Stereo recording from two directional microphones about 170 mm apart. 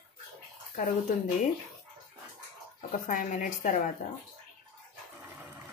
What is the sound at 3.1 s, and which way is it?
A woman's voice, 50° left (ahead or behind).